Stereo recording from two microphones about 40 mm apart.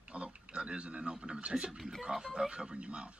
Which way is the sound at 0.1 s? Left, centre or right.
Right.